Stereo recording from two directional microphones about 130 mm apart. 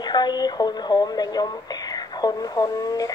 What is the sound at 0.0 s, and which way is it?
A woman's voice, 35° left (ahead or behind).